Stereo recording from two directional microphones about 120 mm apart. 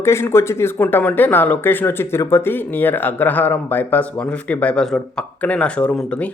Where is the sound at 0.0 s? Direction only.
20° left (ahead or behind).